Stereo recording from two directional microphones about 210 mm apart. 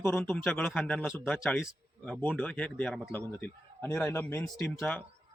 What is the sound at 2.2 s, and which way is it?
A man's voice, 5° left (ahead or behind).